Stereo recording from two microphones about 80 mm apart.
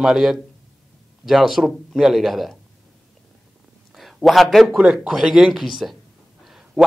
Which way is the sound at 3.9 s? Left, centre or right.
Centre.